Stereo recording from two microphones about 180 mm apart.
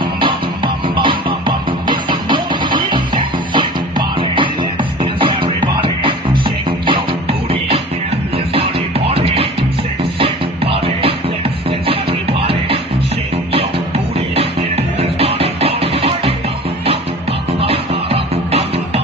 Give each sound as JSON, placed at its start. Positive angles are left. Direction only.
{"t": 0.2, "sound": "music", "side_deg": -25}
{"t": 9.0, "sound": "music", "side_deg": -35}
{"t": 12.5, "sound": "music", "side_deg": -30}
{"t": 17.6, "sound": "music", "side_deg": -30}